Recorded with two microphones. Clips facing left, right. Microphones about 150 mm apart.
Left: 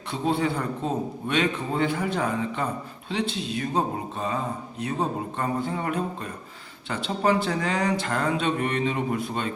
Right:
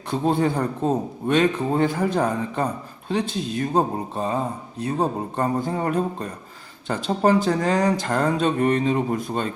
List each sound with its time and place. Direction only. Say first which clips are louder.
0.1 s speech: right 4 dB; 45° right (ahead or behind)